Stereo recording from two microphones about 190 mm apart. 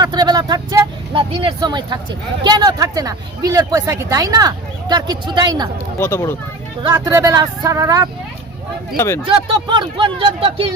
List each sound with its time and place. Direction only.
0.0 s vehicle: 20° right (ahead or behind)
2.4 s speech: 20° right (ahead or behind)
6.0 s speech: 15° left (ahead or behind)
6.8 s speech: 15° right (ahead or behind)
9.0 s speech: 15° left (ahead or behind)
9.2 s speech: 25° right (ahead or behind)